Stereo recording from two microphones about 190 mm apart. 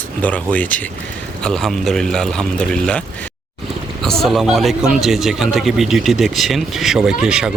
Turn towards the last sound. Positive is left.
turn(degrees=-5)  # may be behind; listen again after turning